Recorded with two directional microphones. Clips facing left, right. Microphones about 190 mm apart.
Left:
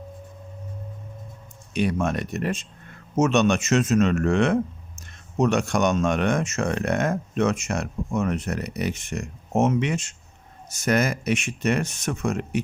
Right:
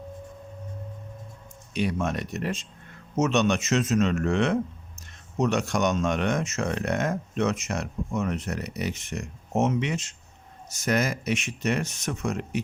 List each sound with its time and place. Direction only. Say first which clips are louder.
1.7 s speech: left 3 dB; 50° left (ahead or behind)